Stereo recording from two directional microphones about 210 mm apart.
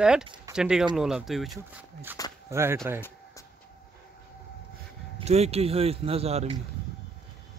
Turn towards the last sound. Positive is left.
turn(degrees=-30)  # may be behind; listen again after turning